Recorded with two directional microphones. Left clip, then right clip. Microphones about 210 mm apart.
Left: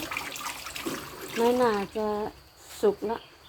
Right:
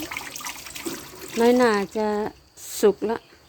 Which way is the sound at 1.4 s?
50° right (ahead or behind).